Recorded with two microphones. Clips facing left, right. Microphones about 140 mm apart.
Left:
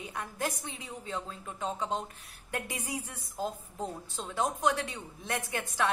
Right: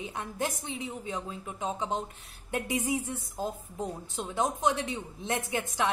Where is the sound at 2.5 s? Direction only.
15° right (ahead or behind).